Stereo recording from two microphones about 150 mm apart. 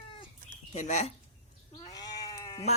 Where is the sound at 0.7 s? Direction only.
55° left (ahead or behind).